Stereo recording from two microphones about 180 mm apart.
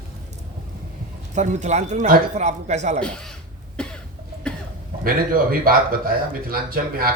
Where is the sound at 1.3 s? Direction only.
40° right (ahead or behind).